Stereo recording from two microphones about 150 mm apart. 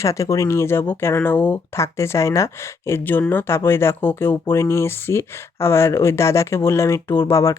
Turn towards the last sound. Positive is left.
turn(degrees=20)  # may be behind; listen again after turning